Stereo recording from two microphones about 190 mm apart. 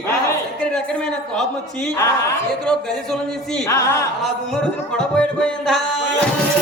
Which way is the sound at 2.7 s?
5° left (ahead or behind).